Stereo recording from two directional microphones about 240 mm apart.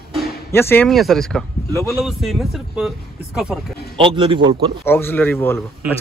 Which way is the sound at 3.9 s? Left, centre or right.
Right.